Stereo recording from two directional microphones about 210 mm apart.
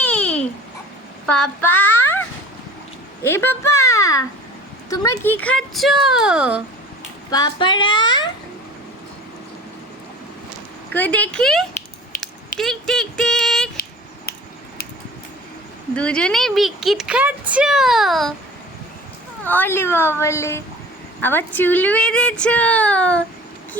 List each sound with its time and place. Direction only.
0.0 s babbling: 5° left (ahead or behind)
1.3 s child singing: 5° left (ahead or behind)
3.2 s speech: 10° left (ahead or behind)
7.3 s speech: 20° left (ahead or behind)
10.9 s speech: 5° left (ahead or behind)
16.0 s speech: 5° left (ahead or behind)
19.5 s speech: 10° left (ahead or behind)